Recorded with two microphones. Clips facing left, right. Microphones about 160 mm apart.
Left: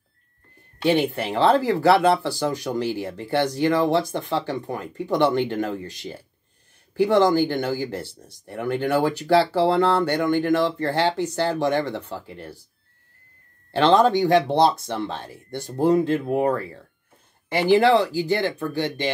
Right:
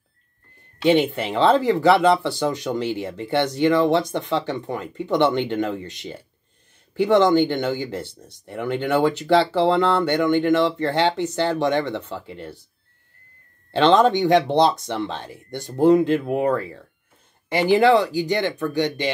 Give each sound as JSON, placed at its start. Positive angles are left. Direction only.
{"t": 0.8, "sound": "speech", "side_deg": -20}
{"t": 9.8, "sound": "speech", "side_deg": 10}
{"t": 10.0, "sound": "speech", "side_deg": -20}
{"t": 13.7, "sound": "speech", "side_deg": -20}
{"t": 17.5, "sound": "speech", "side_deg": -15}